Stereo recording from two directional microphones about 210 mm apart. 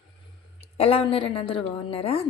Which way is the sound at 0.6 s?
30° left (ahead or behind).